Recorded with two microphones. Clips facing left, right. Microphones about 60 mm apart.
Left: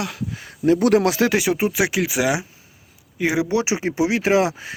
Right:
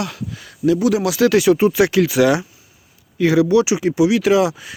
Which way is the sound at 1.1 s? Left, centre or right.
Left.